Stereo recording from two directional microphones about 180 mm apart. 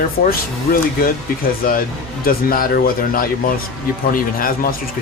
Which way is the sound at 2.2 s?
55° left (ahead or behind).